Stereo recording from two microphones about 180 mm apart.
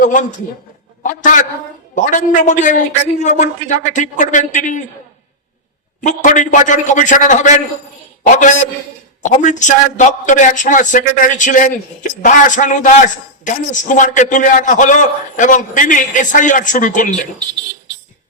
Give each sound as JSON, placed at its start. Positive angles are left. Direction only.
{"t": 0.0, "sound": "speech", "side_deg": 45}
{"t": 6.0, "sound": "speech", "side_deg": 45}